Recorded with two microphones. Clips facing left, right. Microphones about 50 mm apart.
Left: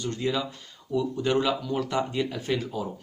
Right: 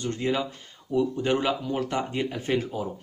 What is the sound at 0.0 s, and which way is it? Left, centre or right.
Speech, right.